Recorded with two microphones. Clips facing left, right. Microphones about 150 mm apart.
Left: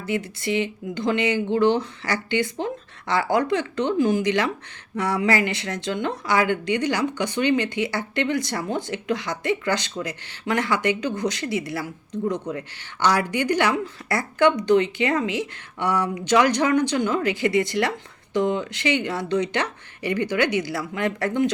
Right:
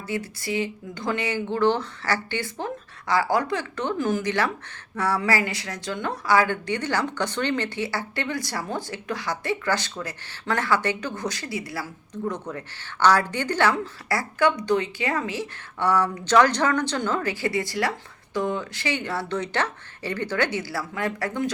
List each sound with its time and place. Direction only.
0.0 s a woman's voice: 20° left (ahead or behind)